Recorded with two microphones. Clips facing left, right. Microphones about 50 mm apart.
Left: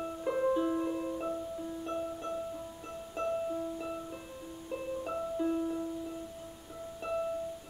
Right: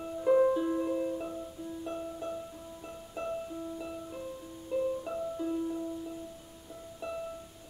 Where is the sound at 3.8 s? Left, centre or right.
Centre.